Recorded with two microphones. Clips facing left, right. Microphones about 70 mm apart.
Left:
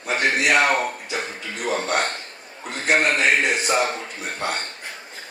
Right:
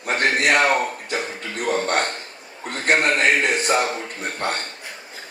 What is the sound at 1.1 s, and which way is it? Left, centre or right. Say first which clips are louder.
A man's voice: right 2 dB; right.